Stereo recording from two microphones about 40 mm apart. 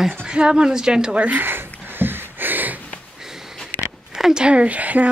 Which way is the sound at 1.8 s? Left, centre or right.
Right.